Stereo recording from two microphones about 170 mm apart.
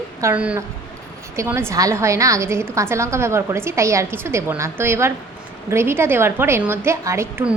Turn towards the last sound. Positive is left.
turn(degrees=-10)  # may be behind; listen again after turning